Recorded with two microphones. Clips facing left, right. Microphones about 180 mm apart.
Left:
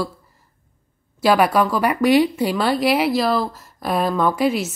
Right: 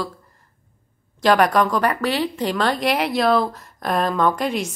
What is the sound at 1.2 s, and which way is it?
A woman's voice, 5° left (ahead or behind).